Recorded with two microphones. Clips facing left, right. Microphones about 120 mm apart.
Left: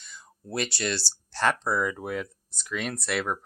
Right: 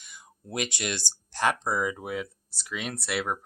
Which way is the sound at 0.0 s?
15° right (ahead or behind).